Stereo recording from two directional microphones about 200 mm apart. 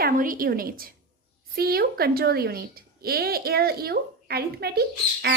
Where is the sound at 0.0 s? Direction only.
45° right (ahead or behind).